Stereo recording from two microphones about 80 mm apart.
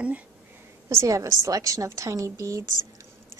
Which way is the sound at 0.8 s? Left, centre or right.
Right.